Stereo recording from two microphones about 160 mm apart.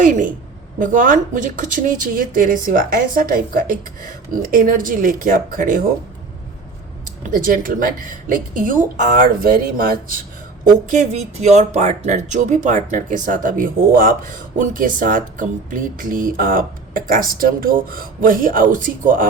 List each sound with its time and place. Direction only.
0.0 s a woman's voice: 55° right (ahead or behind)
7.2 s speech: 60° right (ahead or behind)
10.8 s speech: 50° right (ahead or behind)